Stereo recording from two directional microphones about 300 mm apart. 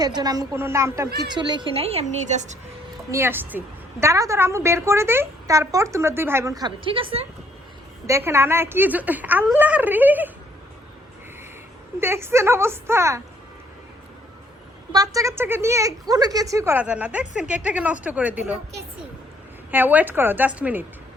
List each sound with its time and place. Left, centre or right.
0.0 s a woman's voice: centre
3.1 s a woman's voice: centre
11.9 s a woman's voice: centre
14.9 s a woman's voice: centre
19.7 s a woman's voice: centre